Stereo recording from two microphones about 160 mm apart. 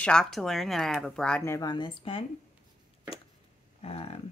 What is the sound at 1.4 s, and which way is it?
Speech, 20° left (ahead or behind).